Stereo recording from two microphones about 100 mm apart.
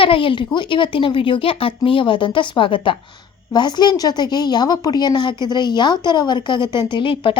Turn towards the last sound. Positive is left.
turn(degrees=60)  # may be behind; listen again after turning